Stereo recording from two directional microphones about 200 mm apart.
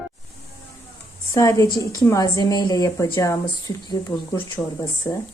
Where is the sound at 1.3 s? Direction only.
15° left (ahead or behind).